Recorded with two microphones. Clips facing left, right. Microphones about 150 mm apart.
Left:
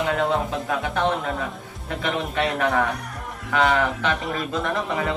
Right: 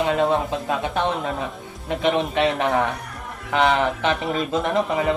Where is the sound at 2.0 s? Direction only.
20° right (ahead or behind).